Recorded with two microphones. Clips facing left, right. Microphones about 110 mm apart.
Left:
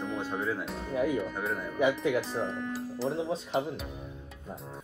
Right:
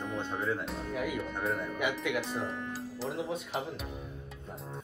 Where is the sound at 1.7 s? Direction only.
35° left (ahead or behind).